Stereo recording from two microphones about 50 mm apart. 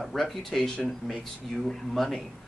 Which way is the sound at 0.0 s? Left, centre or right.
Centre.